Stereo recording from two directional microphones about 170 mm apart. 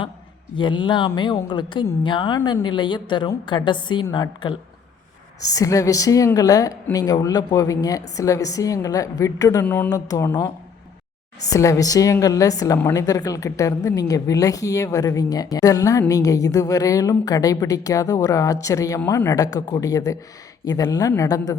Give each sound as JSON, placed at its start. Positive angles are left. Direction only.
{"t": 0.5, "sound": "a woman's voice", "side_deg": 30}